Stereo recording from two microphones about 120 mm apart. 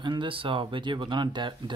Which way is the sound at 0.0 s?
40° right (ahead or behind).